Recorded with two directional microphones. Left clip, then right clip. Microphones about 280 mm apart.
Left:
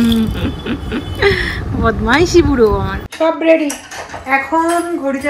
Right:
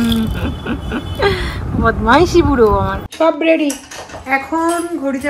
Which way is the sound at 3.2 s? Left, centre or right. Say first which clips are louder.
Left 1 dB; centre.